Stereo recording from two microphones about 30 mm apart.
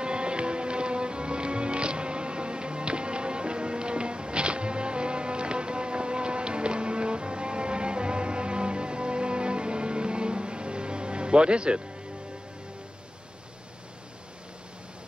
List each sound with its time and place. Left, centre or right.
0.0 s music: right